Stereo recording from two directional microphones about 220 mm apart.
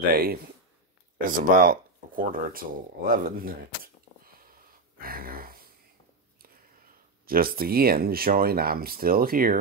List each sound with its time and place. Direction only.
0.1 s speech: 40° right (ahead or behind)
1.2 s a sound: 40° right (ahead or behind)
7.2 s speech: 40° right (ahead or behind)